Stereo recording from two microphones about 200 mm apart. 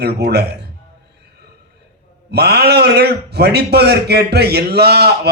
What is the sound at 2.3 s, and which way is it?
A man's voice, 55° right (ahead or behind).